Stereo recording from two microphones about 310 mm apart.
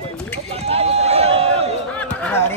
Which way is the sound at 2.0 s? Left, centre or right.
Centre.